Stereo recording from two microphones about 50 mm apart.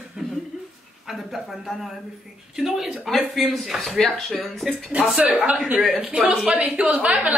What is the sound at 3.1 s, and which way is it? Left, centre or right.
Speech, centre.